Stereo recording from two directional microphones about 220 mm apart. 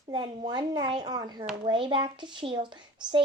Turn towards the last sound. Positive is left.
turn(degrees=-20)  # may be behind; listen again after turning